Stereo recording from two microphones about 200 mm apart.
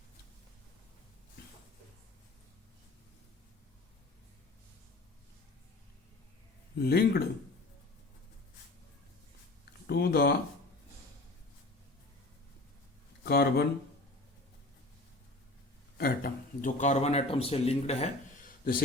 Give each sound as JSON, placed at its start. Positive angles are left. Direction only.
{"t": 6.7, "sound": "speech", "side_deg": 50}
{"t": 9.8, "sound": "a sound", "side_deg": 50}
{"t": 13.2, "sound": "speech", "side_deg": 50}
{"t": 16.0, "sound": "a man's voice", "side_deg": 50}